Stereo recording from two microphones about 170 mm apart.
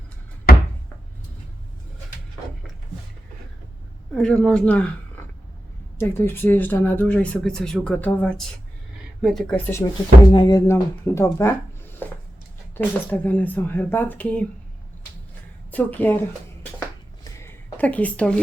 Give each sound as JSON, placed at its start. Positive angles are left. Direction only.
{"t": 4.1, "sound": "speech", "side_deg": 5}
{"t": 6.0, "sound": "speech", "side_deg": 15}
{"t": 10.3, "sound": "speech", "side_deg": 25}
{"t": 12.0, "sound": "chopping", "side_deg": 10}
{"t": 12.7, "sound": "speech", "side_deg": 10}
{"t": 15.7, "sound": "speech", "side_deg": 10}
{"t": 17.2, "sound": "a sound", "side_deg": 10}